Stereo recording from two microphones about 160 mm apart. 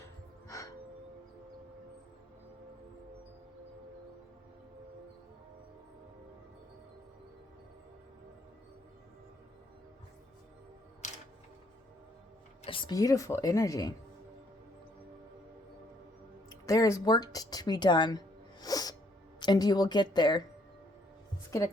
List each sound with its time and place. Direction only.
0.4 s music: 20° left (ahead or behind)
11.0 s music: 50° left (ahead or behind)
12.6 s speech: 30° left (ahead or behind)
16.6 s speech: 20° left (ahead or behind)
18.6 s sneeze: 25° left (ahead or behind)
19.4 s speech: 25° left (ahead or behind)